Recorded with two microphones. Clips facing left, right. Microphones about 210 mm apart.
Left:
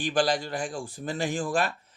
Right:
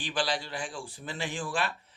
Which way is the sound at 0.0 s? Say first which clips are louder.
Left 6 dB; 45° left (ahead or behind).